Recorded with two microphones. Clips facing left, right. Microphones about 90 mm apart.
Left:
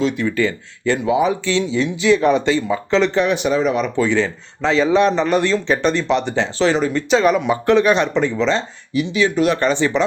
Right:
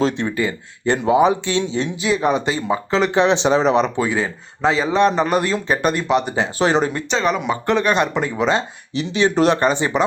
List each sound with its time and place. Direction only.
0.0 s speech: 30° right (ahead or behind)
2.3 s a man's voice: 15° right (ahead or behind)
4.0 s a man's voice: 10° right (ahead or behind)
7.1 s speech: 5° left (ahead or behind); by 8.6 s 15° right (ahead or behind)
9.0 s speech: 30° right (ahead or behind)
9.6 s a man's voice: 15° right (ahead or behind)